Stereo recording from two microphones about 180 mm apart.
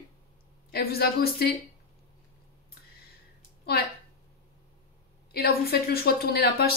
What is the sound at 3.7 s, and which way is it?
Speech, 60° left (ahead or behind).